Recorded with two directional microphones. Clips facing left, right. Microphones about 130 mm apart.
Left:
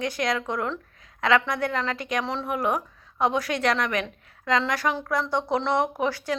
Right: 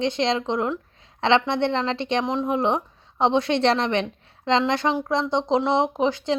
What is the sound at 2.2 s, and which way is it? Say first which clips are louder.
A woman's voice: right 4 dB; 15° right (ahead or behind).